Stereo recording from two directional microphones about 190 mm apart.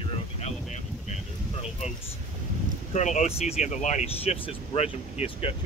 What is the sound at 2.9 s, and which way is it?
Speech, 40° left (ahead or behind).